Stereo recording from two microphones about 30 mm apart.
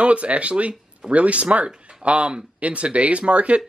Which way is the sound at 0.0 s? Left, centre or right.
Right.